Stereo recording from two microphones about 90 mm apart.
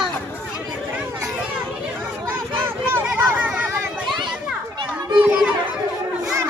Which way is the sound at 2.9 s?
20° right (ahead or behind).